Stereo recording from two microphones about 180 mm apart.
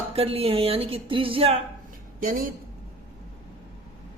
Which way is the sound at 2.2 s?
50° right (ahead or behind).